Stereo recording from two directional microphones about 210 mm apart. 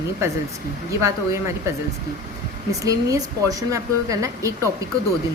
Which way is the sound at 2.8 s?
15° right (ahead or behind).